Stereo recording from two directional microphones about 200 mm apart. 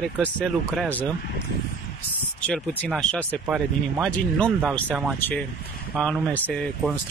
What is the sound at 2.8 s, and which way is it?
Speech, 5° left (ahead or behind).